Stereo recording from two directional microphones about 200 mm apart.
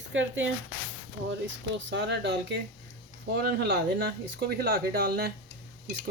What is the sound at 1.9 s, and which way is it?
Speech, 60° right (ahead or behind).